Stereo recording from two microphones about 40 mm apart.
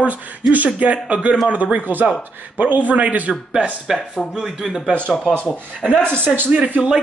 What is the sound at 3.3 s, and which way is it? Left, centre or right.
Speech, centre.